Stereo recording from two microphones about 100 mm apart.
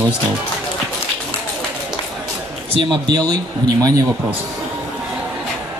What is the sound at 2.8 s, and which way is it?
Speech, 45° right (ahead or behind).